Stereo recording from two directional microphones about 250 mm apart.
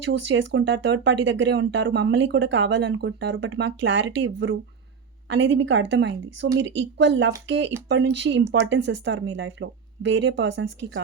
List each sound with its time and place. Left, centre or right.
0.1 s speech: right